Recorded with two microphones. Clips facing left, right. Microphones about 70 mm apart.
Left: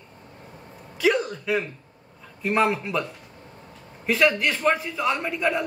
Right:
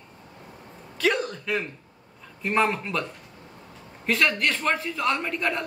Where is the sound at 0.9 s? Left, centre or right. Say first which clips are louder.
Left 2 dB; centre.